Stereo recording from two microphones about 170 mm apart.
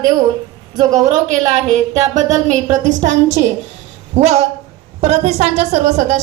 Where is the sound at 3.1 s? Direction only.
90° right.